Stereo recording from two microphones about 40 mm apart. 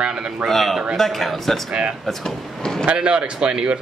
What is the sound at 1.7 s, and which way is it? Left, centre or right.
Speech, right.